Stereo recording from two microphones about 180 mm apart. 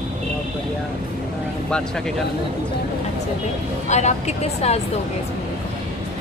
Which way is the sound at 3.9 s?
40° left (ahead or behind).